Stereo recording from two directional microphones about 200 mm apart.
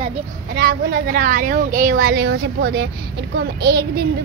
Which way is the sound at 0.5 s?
50° right (ahead or behind).